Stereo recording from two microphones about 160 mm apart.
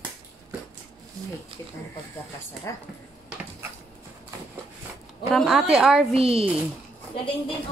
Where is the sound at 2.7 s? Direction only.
20° left (ahead or behind).